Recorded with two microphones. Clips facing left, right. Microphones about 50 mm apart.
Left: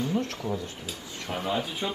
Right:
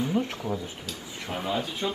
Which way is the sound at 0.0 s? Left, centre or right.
Centre.